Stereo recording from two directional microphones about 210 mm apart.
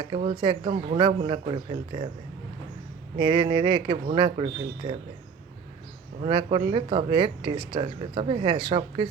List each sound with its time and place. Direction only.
0.0 s speech: 25° right (ahead or behind)
3.2 s speech: 20° right (ahead or behind)
6.2 s speech: 25° right (ahead or behind)